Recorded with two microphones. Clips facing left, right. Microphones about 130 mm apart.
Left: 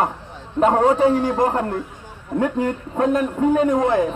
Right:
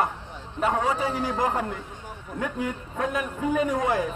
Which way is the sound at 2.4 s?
60° left (ahead or behind).